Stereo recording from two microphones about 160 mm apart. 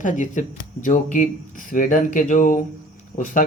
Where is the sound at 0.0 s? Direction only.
55° left (ahead or behind).